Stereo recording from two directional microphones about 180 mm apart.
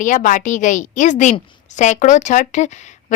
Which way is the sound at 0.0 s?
45° left (ahead or behind).